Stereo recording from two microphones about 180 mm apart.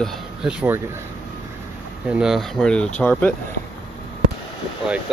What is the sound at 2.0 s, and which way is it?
Speech, 5° right (ahead or behind).